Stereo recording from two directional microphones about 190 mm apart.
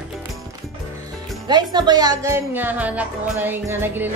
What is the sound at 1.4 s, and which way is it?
A woman's voice, 20° right (ahead or behind).